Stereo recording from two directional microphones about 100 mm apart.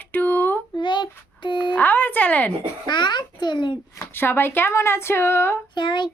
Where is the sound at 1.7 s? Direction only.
20° left (ahead or behind).